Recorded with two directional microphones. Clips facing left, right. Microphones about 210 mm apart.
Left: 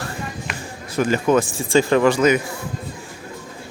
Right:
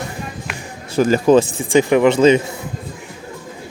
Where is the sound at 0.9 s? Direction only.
35° right (ahead or behind).